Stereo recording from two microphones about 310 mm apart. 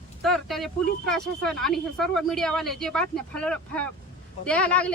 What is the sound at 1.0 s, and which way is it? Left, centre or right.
Speech, centre.